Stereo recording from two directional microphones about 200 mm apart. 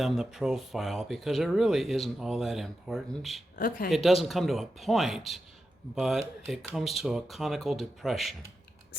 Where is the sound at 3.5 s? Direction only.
45° left (ahead or behind).